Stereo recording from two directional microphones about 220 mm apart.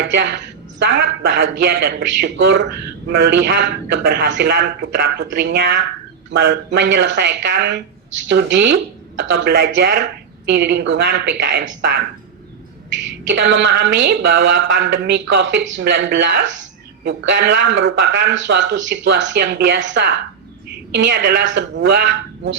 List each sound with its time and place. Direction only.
0.0 s speech: 55° right (ahead or behind)